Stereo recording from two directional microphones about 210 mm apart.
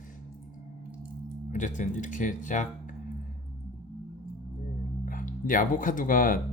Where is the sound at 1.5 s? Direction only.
35° left (ahead or behind).